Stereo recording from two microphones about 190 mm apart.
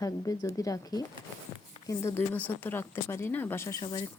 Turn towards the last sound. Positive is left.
turn(degrees=25)  # may be behind; listen again after turning